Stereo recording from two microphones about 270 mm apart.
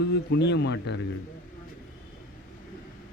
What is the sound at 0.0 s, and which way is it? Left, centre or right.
Speech, left.